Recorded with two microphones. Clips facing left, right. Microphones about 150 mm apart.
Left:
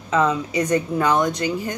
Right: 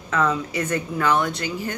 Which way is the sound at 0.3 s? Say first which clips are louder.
Left 4 dB; 15° left (ahead or behind).